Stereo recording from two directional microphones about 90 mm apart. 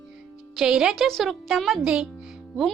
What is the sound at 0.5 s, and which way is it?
Speech, 10° right (ahead or behind).